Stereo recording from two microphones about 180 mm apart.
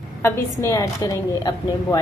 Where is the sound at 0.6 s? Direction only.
15° left (ahead or behind).